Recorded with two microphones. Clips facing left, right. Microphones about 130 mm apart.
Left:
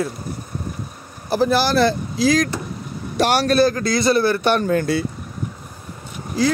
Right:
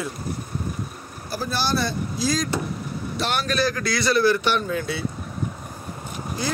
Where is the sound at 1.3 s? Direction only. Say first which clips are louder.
Left 8 dB; 85° left.